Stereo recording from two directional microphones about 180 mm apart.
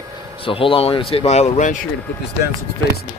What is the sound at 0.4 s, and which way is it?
Speech, 30° left (ahead or behind).